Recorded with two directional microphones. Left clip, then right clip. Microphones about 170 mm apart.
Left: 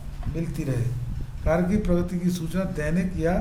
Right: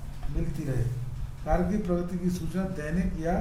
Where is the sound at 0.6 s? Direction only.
50° left (ahead or behind).